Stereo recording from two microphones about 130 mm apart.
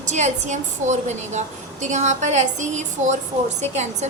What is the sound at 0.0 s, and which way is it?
A woman's voice, 65° right (ahead or behind).